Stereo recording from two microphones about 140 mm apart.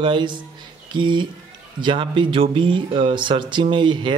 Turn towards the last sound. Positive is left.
turn(degrees=-35)  # may be behind; listen again after turning